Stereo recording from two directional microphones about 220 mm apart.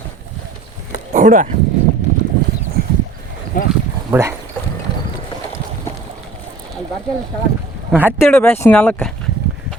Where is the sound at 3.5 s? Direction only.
40° left (ahead or behind).